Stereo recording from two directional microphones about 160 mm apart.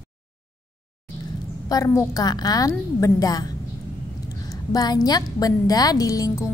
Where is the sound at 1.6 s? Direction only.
20° left (ahead or behind).